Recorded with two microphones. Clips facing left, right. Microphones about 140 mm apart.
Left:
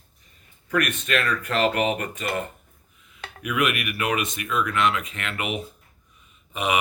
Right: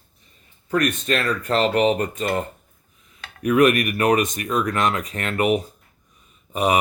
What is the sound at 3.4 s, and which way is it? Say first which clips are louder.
Speech: right 9 dB; 40° right (ahead or behind).